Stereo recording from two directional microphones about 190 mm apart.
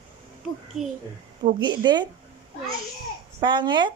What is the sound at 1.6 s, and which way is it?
Speech, 25° right (ahead or behind).